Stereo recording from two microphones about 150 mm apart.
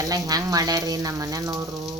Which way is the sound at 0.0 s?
25° right (ahead or behind).